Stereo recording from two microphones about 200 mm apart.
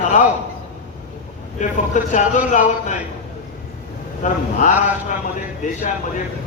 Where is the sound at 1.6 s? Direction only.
40° left (ahead or behind).